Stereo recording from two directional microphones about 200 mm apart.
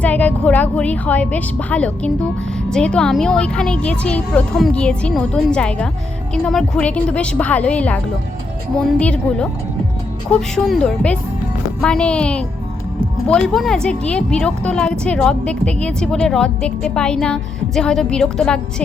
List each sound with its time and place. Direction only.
0.0 s a woman's voice: 5° left (ahead or behind)
10.5 s a woman's voice: centre (ahead or behind)